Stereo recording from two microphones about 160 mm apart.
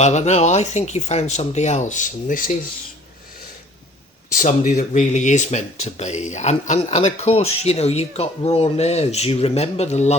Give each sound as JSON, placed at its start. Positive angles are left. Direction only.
{"t": 0.0, "sound": "speech", "side_deg": 45}
{"t": 4.4, "sound": "speech", "side_deg": 55}